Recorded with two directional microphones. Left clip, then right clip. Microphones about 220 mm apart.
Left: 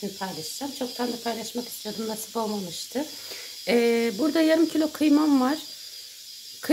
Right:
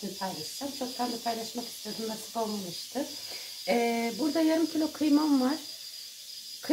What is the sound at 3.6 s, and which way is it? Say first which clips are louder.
Speech: left 6 dB; 50° left (ahead or behind).